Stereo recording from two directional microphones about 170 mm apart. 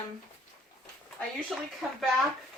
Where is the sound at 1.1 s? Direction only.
Centre (ahead or behind).